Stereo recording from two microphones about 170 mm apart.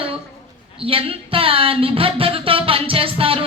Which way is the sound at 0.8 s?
30° right (ahead or behind).